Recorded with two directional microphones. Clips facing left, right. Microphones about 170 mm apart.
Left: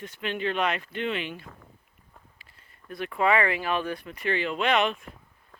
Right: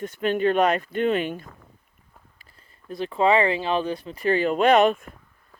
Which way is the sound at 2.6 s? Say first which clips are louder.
Right 5 dB; 30° right (ahead or behind).